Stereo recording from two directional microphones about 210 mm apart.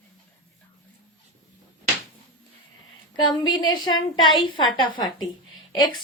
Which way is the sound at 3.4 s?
20° left (ahead or behind).